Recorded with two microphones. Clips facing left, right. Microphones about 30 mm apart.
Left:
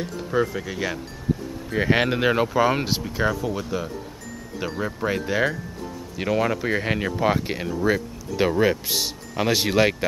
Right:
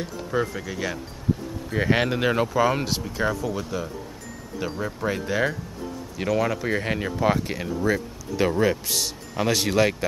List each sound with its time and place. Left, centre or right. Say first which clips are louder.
0.0 s speech: left 2 dB; centre